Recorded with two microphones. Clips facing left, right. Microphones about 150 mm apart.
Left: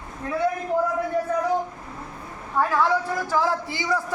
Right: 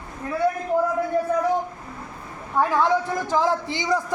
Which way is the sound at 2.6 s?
20° right (ahead or behind).